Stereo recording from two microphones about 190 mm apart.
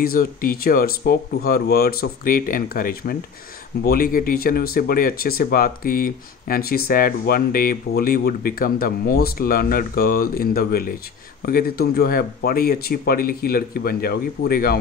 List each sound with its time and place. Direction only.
0.0 s speech: 50° left (ahead or behind)